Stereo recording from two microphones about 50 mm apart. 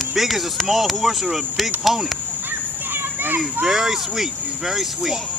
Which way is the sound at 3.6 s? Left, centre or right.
Centre.